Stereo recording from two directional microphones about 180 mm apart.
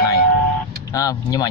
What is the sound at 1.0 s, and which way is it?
Speech, 20° left (ahead or behind).